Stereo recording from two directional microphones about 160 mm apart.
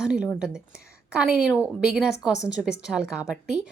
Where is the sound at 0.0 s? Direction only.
5° right (ahead or behind).